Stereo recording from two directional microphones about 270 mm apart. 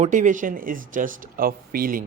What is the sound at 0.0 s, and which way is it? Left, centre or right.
Speech, right.